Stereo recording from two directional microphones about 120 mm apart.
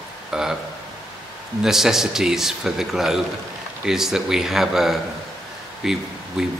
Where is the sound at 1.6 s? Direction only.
5° right (ahead or behind).